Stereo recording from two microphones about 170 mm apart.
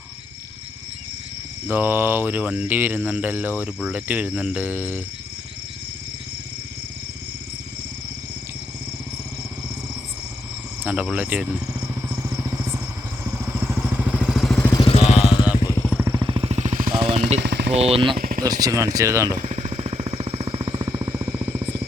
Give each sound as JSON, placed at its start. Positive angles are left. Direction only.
{"t": 1.6, "sound": "cricket", "side_deg": -10}
{"t": 10.8, "sound": "vehicle", "side_deg": -5}
{"t": 14.6, "sound": "vehicle", "side_deg": 20}
{"t": 14.8, "sound": "vehicle", "side_deg": 40}
{"t": 15.5, "sound": "vehicle", "side_deg": 25}
{"t": 16.1, "sound": "jackhammer", "side_deg": -30}
{"t": 16.9, "sound": "jackhammer", "side_deg": -30}
{"t": 17.2, "sound": "jackhammer", "side_deg": -45}
{"t": 17.4, "sound": "jackhammer", "side_deg": -85}
{"t": 17.7, "sound": "speech", "side_deg": -35}
{"t": 18.2, "sound": "a sound", "side_deg": -55}
{"t": 18.6, "sound": "speech", "side_deg": -20}
{"t": 18.9, "sound": "cricket", "side_deg": -20}
{"t": 19.4, "sound": "jackhammer", "side_deg": -45}